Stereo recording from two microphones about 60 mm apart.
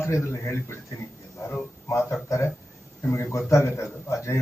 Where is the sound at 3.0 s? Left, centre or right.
Left.